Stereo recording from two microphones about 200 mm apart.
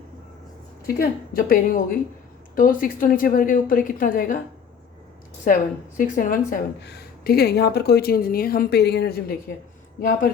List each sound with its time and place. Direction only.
0.9 s a woman's voice: 45° left (ahead or behind)
5.5 s a woman's voice: 45° left (ahead or behind)